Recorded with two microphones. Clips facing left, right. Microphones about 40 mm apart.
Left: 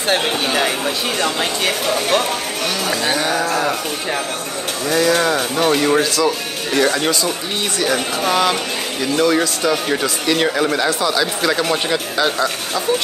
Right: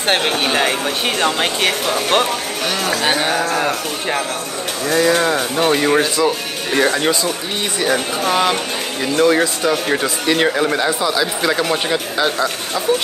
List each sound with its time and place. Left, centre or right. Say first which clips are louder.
0.5 s speech: right 1 dB; right
3.0 s a sound: right 2 dB; right
3.3 s speech: even; centre
4.8 s speech: right 1 dB; centre
7.8 s speech: right 1 dB; centre